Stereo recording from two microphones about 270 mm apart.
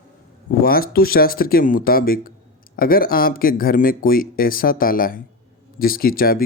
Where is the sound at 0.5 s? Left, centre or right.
Left.